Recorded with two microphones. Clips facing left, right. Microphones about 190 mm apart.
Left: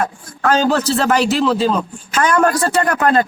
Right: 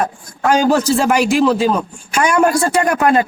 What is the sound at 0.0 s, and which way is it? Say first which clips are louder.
A man's voice: right 1 dB; 15° right (ahead or behind).